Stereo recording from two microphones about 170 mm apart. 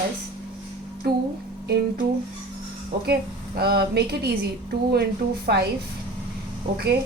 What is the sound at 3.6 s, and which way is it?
Speech, 70° right (ahead or behind).